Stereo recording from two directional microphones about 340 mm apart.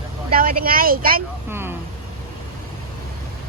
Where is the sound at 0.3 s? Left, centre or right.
Right.